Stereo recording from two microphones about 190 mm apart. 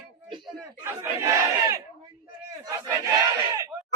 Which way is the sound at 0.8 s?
10° right (ahead or behind).